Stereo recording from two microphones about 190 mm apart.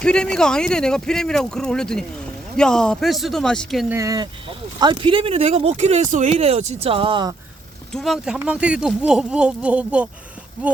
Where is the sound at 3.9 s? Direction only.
15° right (ahead or behind).